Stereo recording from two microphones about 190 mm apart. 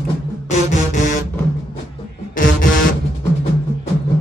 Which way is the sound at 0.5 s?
40° left (ahead or behind).